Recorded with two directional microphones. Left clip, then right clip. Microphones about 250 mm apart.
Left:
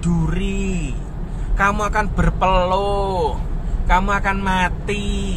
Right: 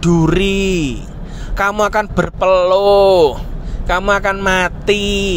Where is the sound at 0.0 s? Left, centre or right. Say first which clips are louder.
Right 12 dB; right.